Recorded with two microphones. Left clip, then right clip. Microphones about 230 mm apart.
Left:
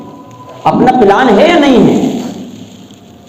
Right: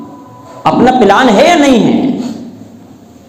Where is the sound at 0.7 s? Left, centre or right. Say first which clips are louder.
Even; right.